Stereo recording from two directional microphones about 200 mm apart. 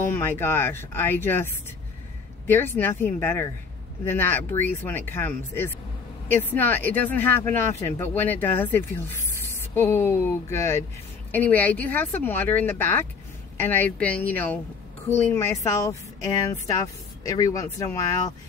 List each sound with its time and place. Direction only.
0.0 s speech: 10° left (ahead or behind)
17.2 s speech: 15° left (ahead or behind)